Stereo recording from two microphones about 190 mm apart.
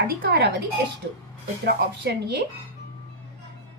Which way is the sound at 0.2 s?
55° right (ahead or behind).